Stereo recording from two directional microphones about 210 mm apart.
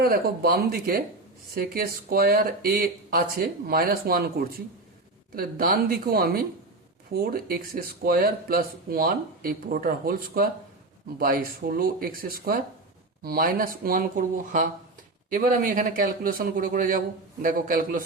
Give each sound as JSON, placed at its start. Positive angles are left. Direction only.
{"t": 0.0, "sound": "a man's voice", "side_deg": -45}